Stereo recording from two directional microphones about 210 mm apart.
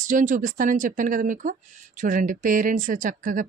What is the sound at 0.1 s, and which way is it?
Speech, 40° right (ahead or behind).